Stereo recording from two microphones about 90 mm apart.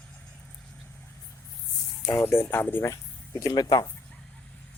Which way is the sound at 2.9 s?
40° left (ahead or behind).